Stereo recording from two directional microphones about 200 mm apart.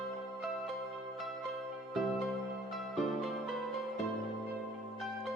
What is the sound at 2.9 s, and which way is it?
Music, centre (ahead or behind).